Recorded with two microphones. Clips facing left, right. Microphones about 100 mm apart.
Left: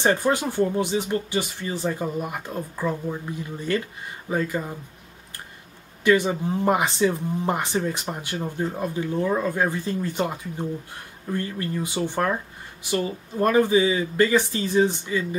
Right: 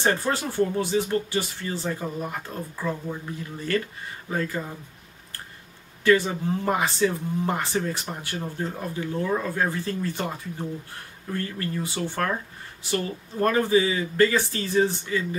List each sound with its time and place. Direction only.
0.0 s speech: 15° left (ahead or behind)
4.3 s speech: 15° left (ahead or behind)
6.0 s speech: 15° left (ahead or behind)